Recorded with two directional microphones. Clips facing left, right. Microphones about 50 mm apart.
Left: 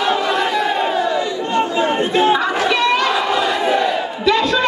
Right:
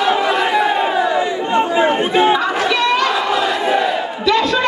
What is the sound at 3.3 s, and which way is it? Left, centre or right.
Crowd, centre.